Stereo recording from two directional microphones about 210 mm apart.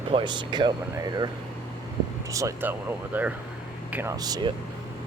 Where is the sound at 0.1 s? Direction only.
25° right (ahead or behind).